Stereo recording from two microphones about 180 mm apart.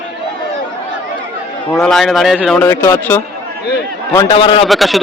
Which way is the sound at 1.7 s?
5° left (ahead or behind).